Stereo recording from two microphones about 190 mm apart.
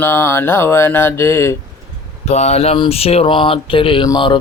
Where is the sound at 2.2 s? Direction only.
35° left (ahead or behind).